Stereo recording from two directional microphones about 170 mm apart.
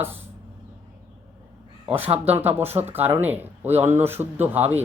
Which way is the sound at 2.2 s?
10° right (ahead or behind).